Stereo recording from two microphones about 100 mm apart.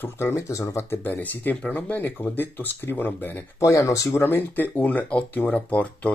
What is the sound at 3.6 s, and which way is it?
Speech, 30° left (ahead or behind).